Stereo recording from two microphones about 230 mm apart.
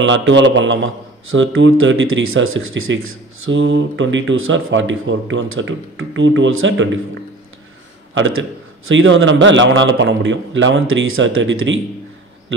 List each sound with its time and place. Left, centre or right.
0.0 s a man's voice: right
8.1 s speech: right